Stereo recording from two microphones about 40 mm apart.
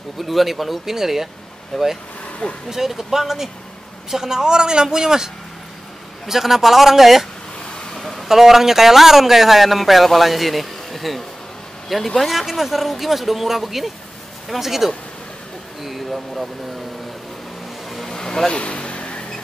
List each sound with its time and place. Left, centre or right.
0.2 s speech: centre
1.7 s speech: centre
2.2 s vehicle: left
2.7 s a man's voice: centre
7.9 s a sound: centre
8.3 s a man's voice: centre
15.8 s a sound: centre
17.8 s vehicle: centre
18.1 s vehicle: centre
18.5 s vehicle: left